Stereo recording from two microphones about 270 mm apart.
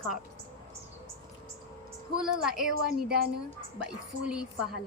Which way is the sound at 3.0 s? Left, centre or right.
Right.